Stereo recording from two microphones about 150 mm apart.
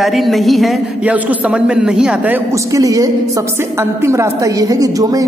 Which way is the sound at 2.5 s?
20° right (ahead or behind).